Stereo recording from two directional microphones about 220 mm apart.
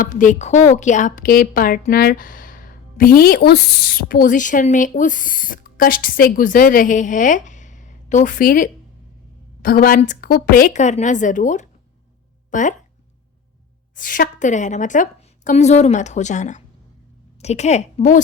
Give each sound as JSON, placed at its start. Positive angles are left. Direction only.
{"t": 0.0, "sound": "a woman's voice", "side_deg": 35}
{"t": 13.9, "sound": "a woman's voice", "side_deg": 40}